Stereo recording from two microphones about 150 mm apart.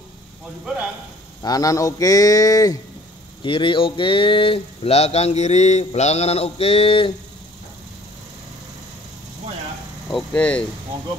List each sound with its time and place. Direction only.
1.4 s speech: 25° left (ahead or behind)
3.4 s speech: 35° left (ahead or behind)
10.0 s speech: 5° left (ahead or behind)